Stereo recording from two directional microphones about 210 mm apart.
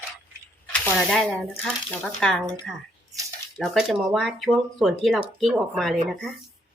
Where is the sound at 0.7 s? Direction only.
5° left (ahead or behind).